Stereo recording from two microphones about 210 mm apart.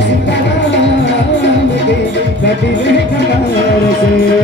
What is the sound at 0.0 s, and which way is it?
Music, 55° left (ahead or behind).